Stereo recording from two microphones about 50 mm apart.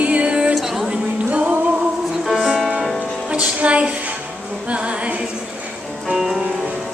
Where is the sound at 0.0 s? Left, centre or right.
Right.